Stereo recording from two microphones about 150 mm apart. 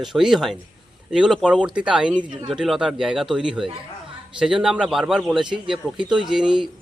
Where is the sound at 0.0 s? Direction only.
Centre (ahead or behind).